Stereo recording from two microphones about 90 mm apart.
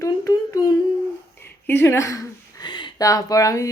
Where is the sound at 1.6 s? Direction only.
25° left (ahead or behind).